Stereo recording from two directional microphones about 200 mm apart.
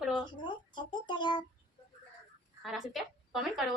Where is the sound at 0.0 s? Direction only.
Centre (ahead or behind).